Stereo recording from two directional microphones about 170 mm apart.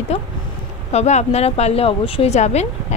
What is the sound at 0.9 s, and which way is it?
Speech, 40° left (ahead or behind).